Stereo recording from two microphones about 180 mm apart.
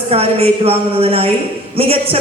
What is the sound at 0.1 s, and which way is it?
A man's voice, 35° right (ahead or behind).